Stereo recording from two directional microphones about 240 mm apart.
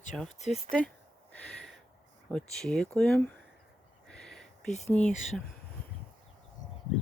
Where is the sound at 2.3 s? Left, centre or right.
Centre.